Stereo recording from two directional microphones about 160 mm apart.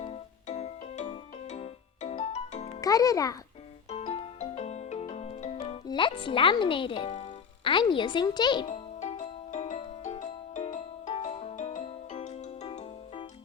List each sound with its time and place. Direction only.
0.0 s music: 40° left (ahead or behind)
2.8 s a child's voice: 20° left (ahead or behind)
3.8 s music: 40° left (ahead or behind)
5.6 s speech: 35° left (ahead or behind)
8.7 s music: 45° left (ahead or behind)